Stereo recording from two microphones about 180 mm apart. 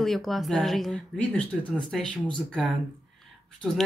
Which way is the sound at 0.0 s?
Centre (ahead or behind).